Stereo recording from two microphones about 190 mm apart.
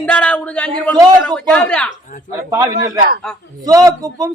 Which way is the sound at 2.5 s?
20° right (ahead or behind).